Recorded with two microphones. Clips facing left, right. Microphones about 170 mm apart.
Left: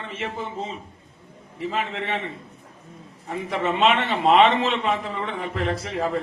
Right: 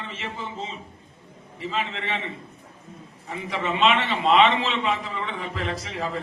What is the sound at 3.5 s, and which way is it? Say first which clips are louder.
A man's voice: left 2 dB; 50° left (ahead or behind).